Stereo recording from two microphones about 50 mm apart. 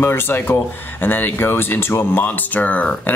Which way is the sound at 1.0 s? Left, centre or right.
Left.